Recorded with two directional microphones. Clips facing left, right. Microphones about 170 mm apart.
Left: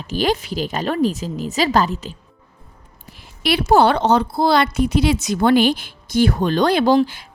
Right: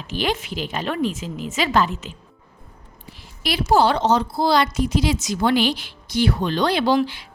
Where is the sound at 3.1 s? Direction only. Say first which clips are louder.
Left 5 dB; 65° left (ahead or behind).